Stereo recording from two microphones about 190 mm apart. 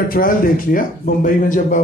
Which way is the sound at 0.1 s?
45° left (ahead or behind).